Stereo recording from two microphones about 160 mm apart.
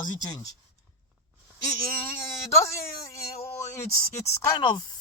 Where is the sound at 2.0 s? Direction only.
15° left (ahead or behind).